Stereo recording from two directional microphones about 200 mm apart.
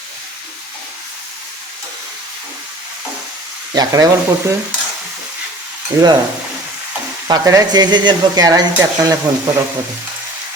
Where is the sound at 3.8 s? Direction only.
15° right (ahead or behind).